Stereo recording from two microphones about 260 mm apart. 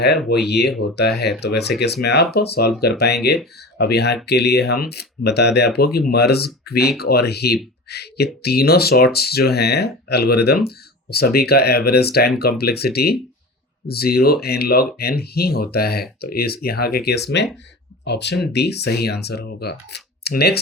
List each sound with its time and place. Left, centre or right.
0.3 s speech: left